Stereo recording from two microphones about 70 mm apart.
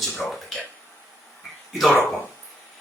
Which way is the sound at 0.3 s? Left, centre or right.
Centre.